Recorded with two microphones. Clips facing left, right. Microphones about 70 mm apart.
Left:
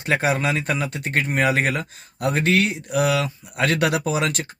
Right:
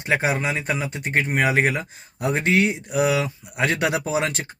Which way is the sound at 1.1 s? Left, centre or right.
Centre.